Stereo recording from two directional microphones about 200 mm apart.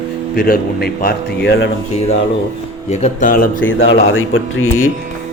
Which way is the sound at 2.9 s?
35° left (ahead or behind).